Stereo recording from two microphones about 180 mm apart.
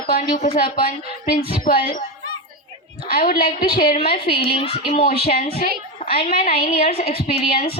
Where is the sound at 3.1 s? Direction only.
55° left (ahead or behind).